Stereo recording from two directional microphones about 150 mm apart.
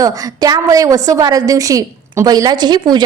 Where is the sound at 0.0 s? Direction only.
25° right (ahead or behind).